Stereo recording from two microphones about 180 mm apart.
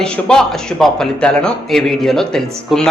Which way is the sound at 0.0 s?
5° left (ahead or behind).